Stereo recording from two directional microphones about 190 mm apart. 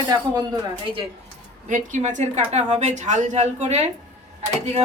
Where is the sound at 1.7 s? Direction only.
40° right (ahead or behind).